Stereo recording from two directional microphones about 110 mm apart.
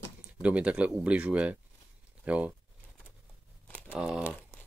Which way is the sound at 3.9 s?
10° right (ahead or behind).